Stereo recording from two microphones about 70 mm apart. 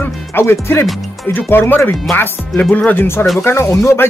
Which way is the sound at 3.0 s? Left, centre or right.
Left.